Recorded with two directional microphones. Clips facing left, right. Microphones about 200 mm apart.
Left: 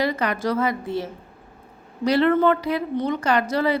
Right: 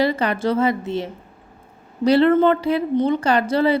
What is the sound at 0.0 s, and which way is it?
A woman's voice, 30° right (ahead or behind).